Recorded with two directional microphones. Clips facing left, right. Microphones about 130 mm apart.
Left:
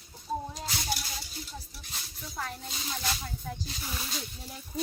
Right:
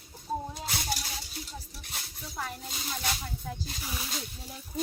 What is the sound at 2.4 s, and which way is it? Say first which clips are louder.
Speech: even; 5° right (ahead or behind).